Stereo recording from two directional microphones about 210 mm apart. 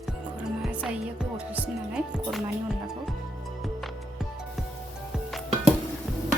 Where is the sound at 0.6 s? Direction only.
5° right (ahead or behind).